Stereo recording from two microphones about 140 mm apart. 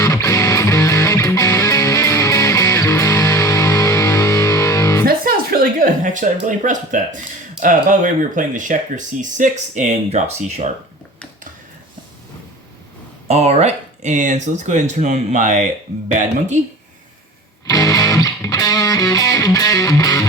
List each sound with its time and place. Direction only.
0.0 s music: 20° left (ahead or behind)
5.0 s a sound: 90° right; by 7.2 s 65° right (ahead or behind)
7.6 s speech: 70° right (ahead or behind); by 10.7 s 55° right (ahead or behind)
13.2 s speech: 50° right (ahead or behind)
17.7 s music: 25° left (ahead or behind)